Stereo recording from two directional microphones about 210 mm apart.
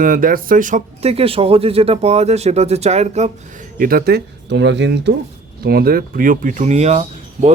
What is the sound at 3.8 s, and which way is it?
Speech, 45° right (ahead or behind).